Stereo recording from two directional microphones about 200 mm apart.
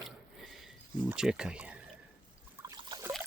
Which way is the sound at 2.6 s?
15° right (ahead or behind).